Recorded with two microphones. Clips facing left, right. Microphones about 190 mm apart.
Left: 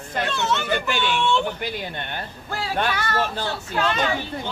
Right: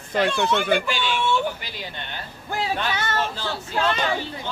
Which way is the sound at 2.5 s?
20° right (ahead or behind).